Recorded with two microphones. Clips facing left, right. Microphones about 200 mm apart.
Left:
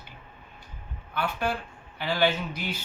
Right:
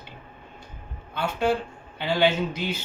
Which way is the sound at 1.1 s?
25° right (ahead or behind).